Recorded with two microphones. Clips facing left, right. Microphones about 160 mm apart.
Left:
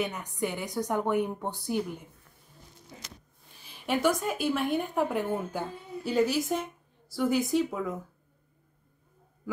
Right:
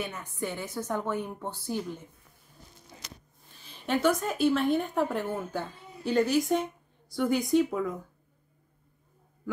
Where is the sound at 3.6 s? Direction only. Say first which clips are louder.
Right 1 dB; 10° left (ahead or behind).